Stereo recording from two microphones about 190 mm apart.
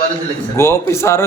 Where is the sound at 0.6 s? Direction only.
15° left (ahead or behind).